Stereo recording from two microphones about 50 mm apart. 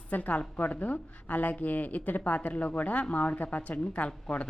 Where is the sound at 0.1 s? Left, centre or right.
Left.